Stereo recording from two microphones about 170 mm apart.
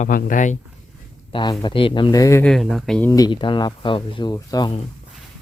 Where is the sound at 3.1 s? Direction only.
25° left (ahead or behind).